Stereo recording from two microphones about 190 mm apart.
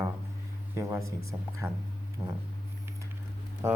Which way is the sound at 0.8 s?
15° right (ahead or behind).